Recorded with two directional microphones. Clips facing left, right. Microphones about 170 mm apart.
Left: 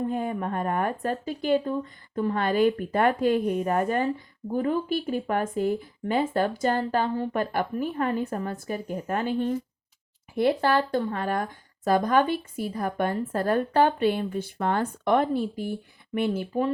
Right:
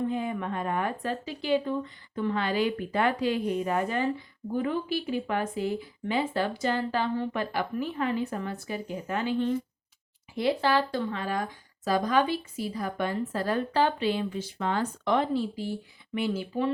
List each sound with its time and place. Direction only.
0.0 s speech: 45° left (ahead or behind)